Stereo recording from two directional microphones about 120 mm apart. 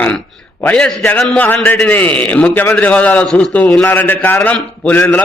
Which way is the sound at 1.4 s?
15° left (ahead or behind).